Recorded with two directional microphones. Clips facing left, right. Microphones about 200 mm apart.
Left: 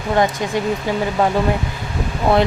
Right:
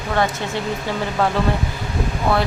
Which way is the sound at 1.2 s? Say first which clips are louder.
Left 2 dB; 15° left (ahead or behind).